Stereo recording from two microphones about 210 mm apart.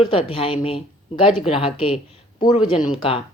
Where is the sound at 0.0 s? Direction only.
25° left (ahead or behind).